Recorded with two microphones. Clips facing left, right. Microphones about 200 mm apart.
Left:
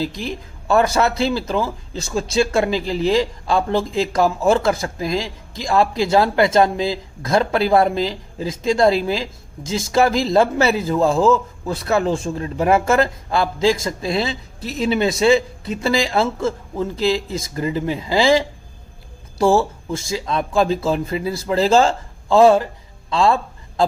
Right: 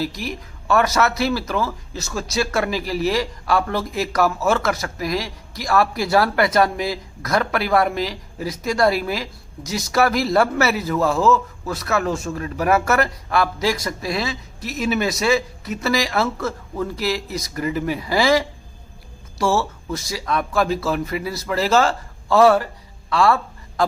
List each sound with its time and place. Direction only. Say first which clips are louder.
0.0 s a man's voice: left 2 dB; 30° left (ahead or behind)